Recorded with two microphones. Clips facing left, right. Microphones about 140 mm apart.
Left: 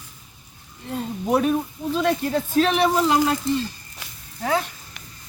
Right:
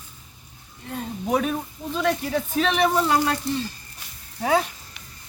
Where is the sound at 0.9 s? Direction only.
5° left (ahead or behind).